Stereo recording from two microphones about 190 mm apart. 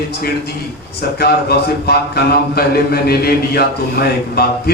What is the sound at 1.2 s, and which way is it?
A man's voice, 55° left (ahead or behind).